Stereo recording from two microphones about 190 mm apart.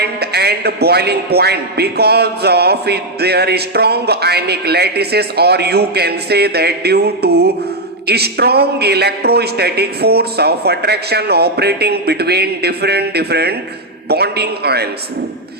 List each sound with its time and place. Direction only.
0.0 s a man's voice: 60° right (ahead or behind)